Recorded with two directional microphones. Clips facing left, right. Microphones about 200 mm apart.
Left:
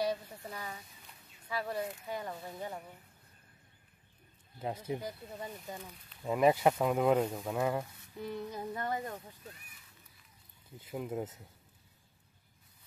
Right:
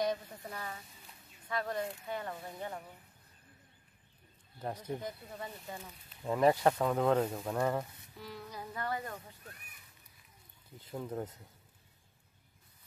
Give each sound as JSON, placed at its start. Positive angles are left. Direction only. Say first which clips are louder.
{"t": 0.0, "sound": "speech", "louder": "even", "side_deg": 5}
{"t": 4.6, "sound": "speech", "louder": "left 2 dB", "side_deg": 10}
{"t": 5.8, "sound": "speech", "louder": "left 1 dB", "side_deg": 0}
{"t": 8.2, "sound": "speech", "louder": "left 6 dB", "side_deg": 25}
{"t": 11.0, "sound": "speech", "louder": "left 2 dB", "side_deg": 10}